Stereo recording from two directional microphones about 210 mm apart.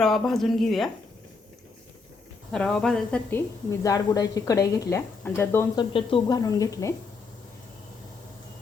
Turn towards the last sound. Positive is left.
turn(degrees=15)  # may be behind; listen again after turning